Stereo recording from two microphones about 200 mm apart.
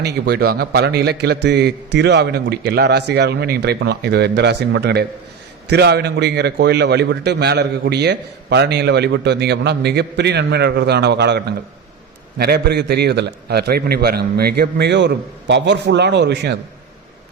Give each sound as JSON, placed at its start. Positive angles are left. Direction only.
{"t": 0.0, "sound": "a man's voice", "side_deg": -55}